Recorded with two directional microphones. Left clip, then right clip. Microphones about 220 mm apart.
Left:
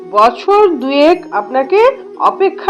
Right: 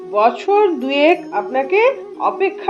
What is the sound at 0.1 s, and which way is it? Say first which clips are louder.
Speech: left 5 dB; 20° left (ahead or behind).